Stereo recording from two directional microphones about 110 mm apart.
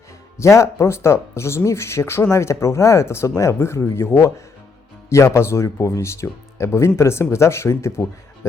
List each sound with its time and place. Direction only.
0.3 s speech: 25° left (ahead or behind)